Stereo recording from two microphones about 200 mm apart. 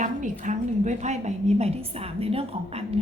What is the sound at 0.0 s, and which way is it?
A woman's voice, 40° right (ahead or behind).